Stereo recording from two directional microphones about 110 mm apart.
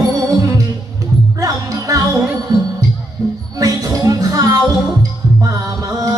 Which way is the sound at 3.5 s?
30° right (ahead or behind).